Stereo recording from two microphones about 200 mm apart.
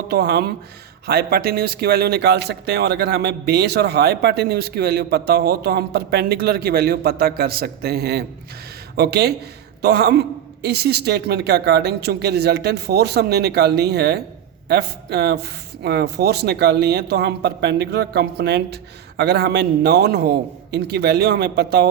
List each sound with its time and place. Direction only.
0.1 s speech: 55° right (ahead or behind)